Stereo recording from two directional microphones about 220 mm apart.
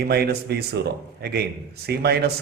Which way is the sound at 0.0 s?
45° right (ahead or behind).